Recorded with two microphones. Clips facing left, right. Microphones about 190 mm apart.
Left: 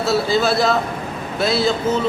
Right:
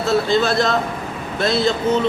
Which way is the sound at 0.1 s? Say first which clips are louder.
Right 1 dB; 5° left (ahead or behind).